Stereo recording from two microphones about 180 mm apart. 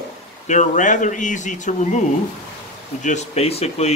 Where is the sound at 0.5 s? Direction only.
45° left (ahead or behind).